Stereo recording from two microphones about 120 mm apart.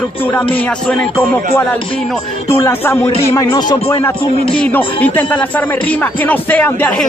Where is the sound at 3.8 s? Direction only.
20° left (ahead or behind).